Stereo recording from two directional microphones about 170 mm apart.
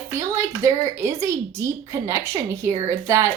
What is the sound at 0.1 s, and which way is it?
A woman's voice, 15° right (ahead or behind).